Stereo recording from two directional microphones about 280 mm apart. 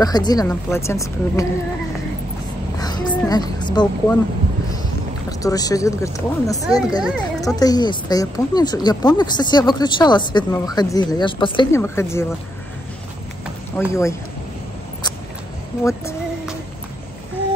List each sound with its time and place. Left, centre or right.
0.0 s speech: centre
2.8 s a sound: centre
5.4 s speech: centre
13.7 s speech: centre
15.8 s speech: centre